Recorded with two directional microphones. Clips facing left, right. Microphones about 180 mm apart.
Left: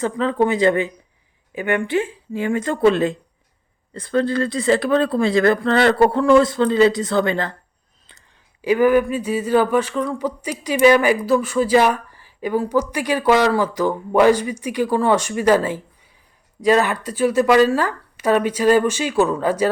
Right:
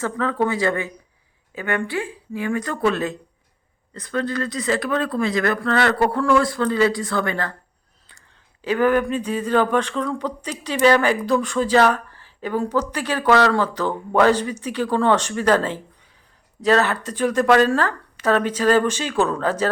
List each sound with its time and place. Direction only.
0.0 s speech: 20° left (ahead or behind)
8.6 s speech: 10° left (ahead or behind)